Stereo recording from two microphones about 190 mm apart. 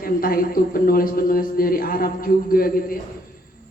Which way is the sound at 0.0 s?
50° left (ahead or behind).